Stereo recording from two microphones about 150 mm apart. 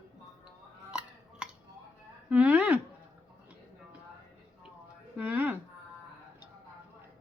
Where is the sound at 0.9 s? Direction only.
5° right (ahead or behind).